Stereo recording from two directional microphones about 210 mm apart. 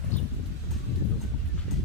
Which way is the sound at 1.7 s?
Centre (ahead or behind).